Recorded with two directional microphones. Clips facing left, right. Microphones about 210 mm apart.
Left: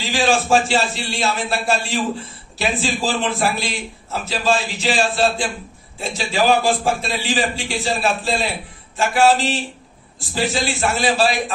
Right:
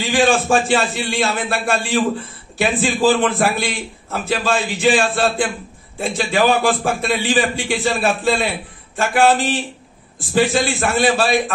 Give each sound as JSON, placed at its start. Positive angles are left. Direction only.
{"t": 0.1, "sound": "a man's voice", "side_deg": -55}